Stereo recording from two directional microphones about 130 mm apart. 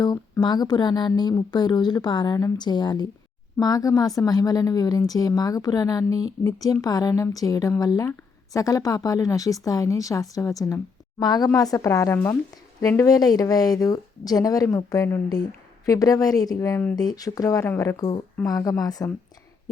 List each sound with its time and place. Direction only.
0.0 s a woman's voice: 30° left (ahead or behind)
13.0 s a woman's voice: 30° left (ahead or behind)
16.9 s a woman's voice: 30° left (ahead or behind)